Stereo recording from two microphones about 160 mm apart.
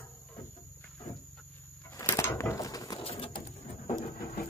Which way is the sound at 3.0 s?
35° left (ahead or behind).